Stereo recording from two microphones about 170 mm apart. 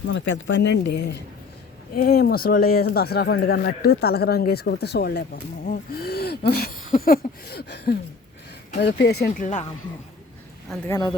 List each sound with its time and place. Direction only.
0.1 s speech: 90° left
2.0 s speech: 65° left (ahead or behind)
5.6 s speech: 60° left (ahead or behind)
8.8 s speech: 80° left
10.8 s speech: 20° left (ahead or behind)